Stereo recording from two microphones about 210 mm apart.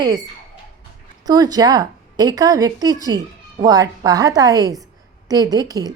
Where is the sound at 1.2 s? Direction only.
20° right (ahead or behind).